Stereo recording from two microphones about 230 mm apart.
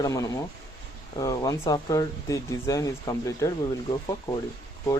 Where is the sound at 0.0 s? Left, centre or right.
Centre.